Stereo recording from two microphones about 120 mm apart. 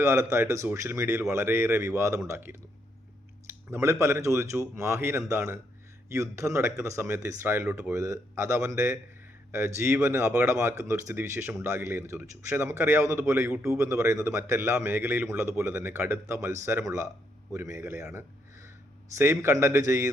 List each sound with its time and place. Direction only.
0.0 s speech: 25° right (ahead or behind)